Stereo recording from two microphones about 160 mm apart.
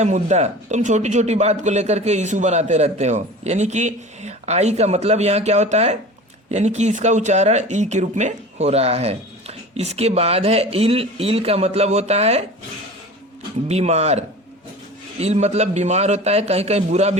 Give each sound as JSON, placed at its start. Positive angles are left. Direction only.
{"t": 0.0, "sound": "a man's voice", "side_deg": -45}
{"t": 13.7, "sound": "a man's voice", "side_deg": -40}